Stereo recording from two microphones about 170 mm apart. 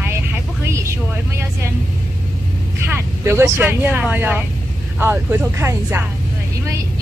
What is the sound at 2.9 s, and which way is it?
Speech, 15° right (ahead or behind).